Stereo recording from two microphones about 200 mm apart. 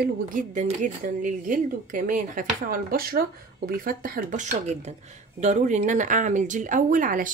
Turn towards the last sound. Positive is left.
turn(degrees=-40)  # may be behind; listen again after turning